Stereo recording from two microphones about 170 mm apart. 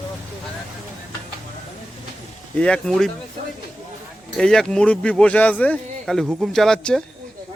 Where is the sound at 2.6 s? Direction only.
5° left (ahead or behind).